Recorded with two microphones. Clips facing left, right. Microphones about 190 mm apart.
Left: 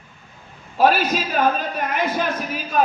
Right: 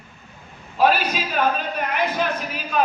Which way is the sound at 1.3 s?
45° left (ahead or behind).